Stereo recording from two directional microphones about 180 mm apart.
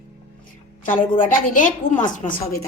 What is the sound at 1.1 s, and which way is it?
Speech, 50° left (ahead or behind).